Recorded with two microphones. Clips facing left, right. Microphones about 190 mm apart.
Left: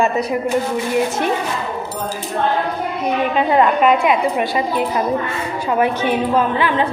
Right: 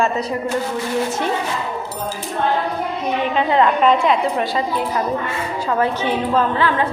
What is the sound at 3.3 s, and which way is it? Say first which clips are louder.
A woman's voice: left 1 dB; 15° left (ahead or behind).